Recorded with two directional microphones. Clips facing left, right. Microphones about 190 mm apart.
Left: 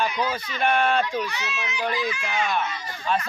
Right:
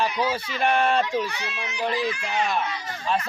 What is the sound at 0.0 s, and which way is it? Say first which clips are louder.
Speech: right 1 dB; 5° right (ahead or behind).